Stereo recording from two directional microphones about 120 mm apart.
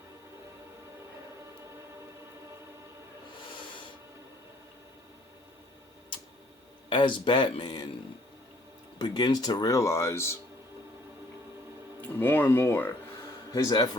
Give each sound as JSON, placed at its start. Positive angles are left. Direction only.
{"t": 6.9, "sound": "speech", "side_deg": 40}
{"t": 9.0, "sound": "speech", "side_deg": 35}
{"t": 12.0, "sound": "speech", "side_deg": 15}
{"t": 13.5, "sound": "speech", "side_deg": 35}